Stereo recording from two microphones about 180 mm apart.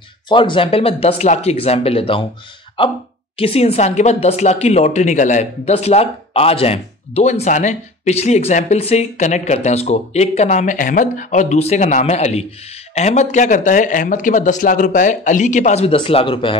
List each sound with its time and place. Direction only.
0.3 s speech: 30° left (ahead or behind)
3.3 s speech: 30° left (ahead or behind)